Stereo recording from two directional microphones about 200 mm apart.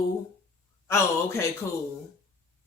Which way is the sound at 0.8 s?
15° left (ahead or behind).